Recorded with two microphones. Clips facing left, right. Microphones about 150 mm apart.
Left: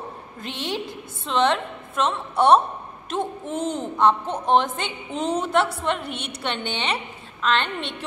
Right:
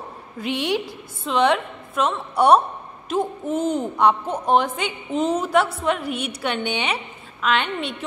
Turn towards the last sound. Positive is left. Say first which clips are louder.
# right 1 dB
turn(degrees=-10)  # may be behind; listen again after turning